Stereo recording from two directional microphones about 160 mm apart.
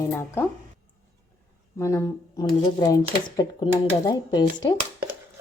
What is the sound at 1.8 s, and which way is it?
Speech, 20° left (ahead or behind).